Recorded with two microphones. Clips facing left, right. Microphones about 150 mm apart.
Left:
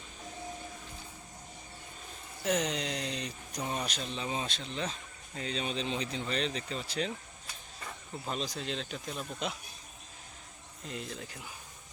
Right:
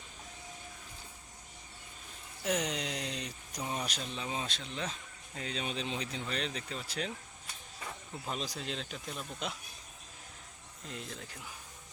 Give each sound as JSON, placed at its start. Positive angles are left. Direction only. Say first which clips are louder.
{"t": 2.4, "sound": "speech", "louder": "left 2 dB", "side_deg": -10}
{"t": 10.8, "sound": "speech", "louder": "left 3 dB", "side_deg": 0}